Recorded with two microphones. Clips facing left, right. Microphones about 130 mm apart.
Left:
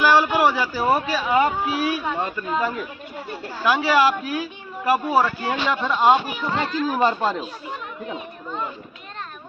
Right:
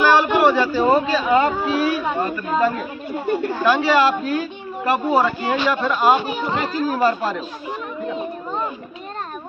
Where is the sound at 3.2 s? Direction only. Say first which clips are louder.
Right 14 dB; 55° right (ahead or behind).